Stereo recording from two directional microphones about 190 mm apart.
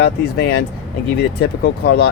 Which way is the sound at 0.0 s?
60° left (ahead or behind).